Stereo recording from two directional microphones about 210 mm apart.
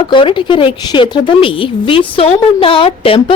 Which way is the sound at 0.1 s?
25° left (ahead or behind).